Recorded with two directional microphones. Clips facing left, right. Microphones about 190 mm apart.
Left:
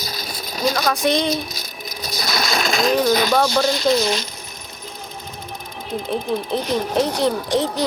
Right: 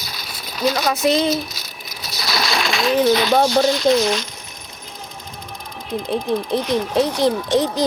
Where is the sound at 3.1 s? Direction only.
40° left (ahead or behind).